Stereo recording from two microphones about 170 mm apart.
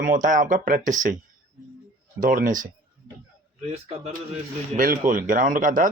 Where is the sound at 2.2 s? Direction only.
55° right (ahead or behind).